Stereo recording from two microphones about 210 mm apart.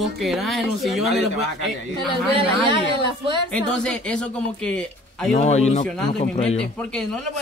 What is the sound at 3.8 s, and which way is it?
Speech, 5° left (ahead or behind).